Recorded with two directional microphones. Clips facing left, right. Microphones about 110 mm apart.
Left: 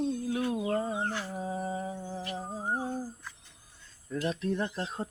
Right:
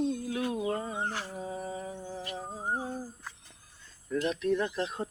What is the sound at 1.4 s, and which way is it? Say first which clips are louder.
Humming: left 3 dB; 30° left (ahead or behind).